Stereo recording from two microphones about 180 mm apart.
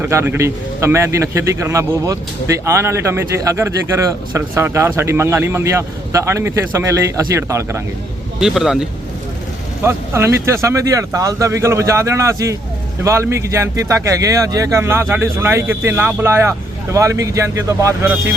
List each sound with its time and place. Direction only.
0.0 s a man's voice: 15° right (ahead or behind)
8.4 s speech: 5° right (ahead or behind)
9.8 s a man's voice: 15° right (ahead or behind)